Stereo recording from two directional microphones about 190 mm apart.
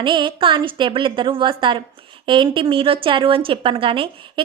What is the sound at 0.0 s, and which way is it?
A woman's voice, 25° right (ahead or behind).